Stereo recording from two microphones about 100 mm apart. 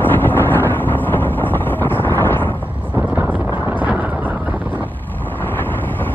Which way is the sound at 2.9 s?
20° right (ahead or behind).